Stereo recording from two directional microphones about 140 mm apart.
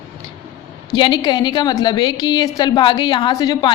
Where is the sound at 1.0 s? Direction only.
35° left (ahead or behind).